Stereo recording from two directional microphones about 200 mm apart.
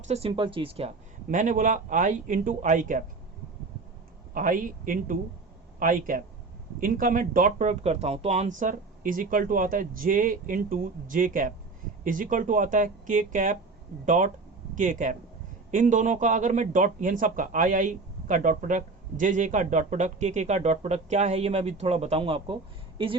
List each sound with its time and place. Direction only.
0.1 s speech: 30° right (ahead or behind)
4.4 s speech: 45° right (ahead or behind); by 22.5 s 25° right (ahead or behind)